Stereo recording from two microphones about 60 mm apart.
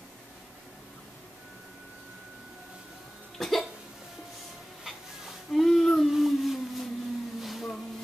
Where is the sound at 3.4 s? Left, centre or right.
Centre.